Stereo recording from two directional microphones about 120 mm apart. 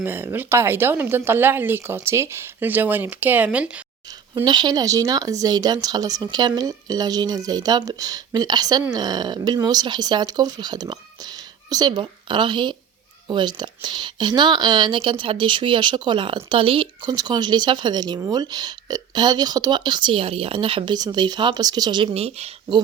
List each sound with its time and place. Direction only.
0.0 s speech: 20° right (ahead or behind)
4.4 s speech: 35° right (ahead or behind)
22.1 s speech: 60° right (ahead or behind)